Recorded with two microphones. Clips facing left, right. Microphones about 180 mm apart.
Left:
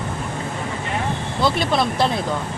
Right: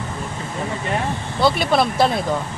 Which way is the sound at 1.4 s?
5° right (ahead or behind).